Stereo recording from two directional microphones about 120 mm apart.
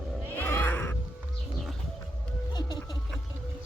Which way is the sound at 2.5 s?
40° left (ahead or behind).